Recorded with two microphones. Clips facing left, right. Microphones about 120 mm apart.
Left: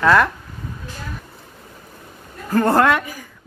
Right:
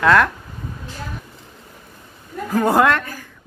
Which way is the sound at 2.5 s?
Centre (ahead or behind).